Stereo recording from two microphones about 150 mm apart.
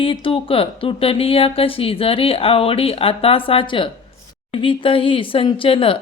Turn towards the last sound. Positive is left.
turn(degrees=35)  # may be behind; listen again after turning